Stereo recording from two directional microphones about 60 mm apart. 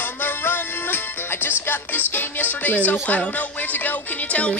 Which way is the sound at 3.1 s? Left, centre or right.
Left.